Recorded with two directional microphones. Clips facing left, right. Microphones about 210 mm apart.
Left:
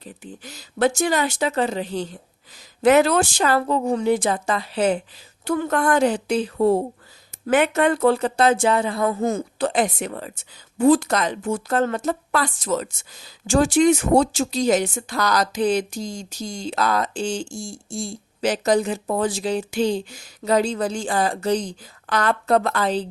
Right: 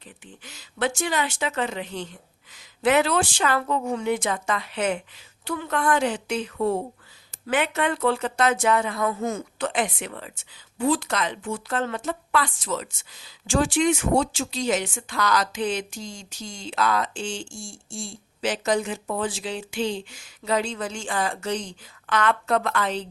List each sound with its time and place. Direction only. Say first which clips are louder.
0.0 s speech: left 8 dB; 40° left (ahead or behind)
5.5 s speech: left 4 dB; 45° left (ahead or behind)
7.4 s speech: left 6 dB; 45° left (ahead or behind)